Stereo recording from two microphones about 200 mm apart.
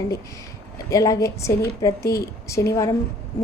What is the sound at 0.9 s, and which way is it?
A woman's voice, 15° left (ahead or behind).